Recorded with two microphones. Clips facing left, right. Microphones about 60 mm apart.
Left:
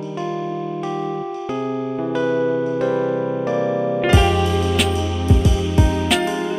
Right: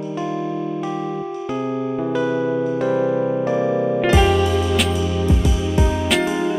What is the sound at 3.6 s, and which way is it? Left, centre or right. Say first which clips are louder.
Music: right 1 dB; centre.